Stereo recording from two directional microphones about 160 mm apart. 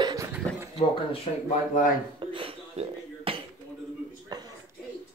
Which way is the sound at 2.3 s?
35° right (ahead or behind).